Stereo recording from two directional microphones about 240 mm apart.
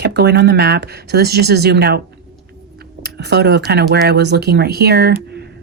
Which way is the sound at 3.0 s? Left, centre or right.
Right.